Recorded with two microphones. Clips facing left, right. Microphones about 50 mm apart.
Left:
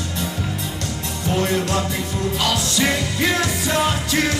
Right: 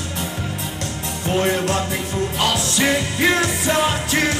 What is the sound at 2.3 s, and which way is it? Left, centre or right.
Music, right.